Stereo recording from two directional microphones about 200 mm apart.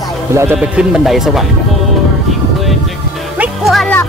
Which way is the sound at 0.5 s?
Centre (ahead or behind).